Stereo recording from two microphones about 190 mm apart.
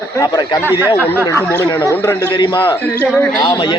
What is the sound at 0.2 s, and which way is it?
A man's voice, 15° left (ahead or behind).